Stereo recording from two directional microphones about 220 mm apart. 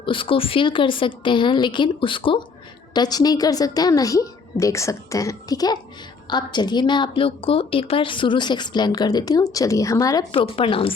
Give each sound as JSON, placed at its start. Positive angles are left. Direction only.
{"t": 0.0, "sound": "a woman's voice", "side_deg": 25}